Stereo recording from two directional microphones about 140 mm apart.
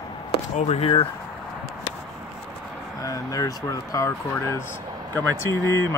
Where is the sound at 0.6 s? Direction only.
50° left (ahead or behind).